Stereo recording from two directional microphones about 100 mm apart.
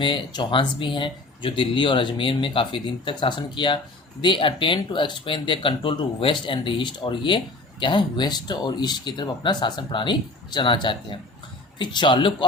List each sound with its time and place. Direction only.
0.0 s speech: 55° left (ahead or behind)